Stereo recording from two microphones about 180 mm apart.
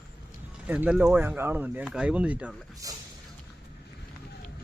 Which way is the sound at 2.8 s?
20° right (ahead or behind).